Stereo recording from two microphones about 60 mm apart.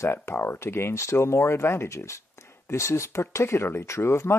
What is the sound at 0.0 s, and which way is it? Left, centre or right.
Speech, left.